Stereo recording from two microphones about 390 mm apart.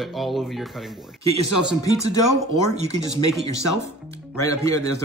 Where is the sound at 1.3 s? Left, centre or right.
Left.